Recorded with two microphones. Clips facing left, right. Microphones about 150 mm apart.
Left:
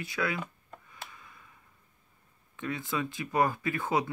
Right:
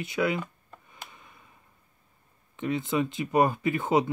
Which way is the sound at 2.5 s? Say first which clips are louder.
Right 6 dB; 20° right (ahead or behind).